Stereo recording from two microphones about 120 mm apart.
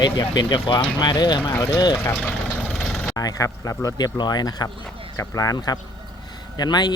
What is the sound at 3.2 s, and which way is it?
Speech, 30° left (ahead or behind).